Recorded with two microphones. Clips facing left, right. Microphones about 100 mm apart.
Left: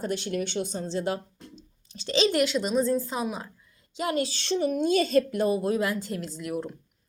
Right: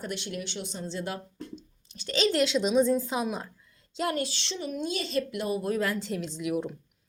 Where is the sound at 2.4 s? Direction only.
5° left (ahead or behind).